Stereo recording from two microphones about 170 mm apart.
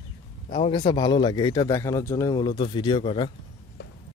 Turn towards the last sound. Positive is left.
turn(degrees=30)  # may be behind; listen again after turning